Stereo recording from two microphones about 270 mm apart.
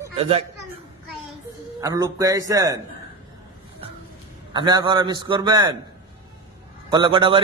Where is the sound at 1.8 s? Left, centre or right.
Centre.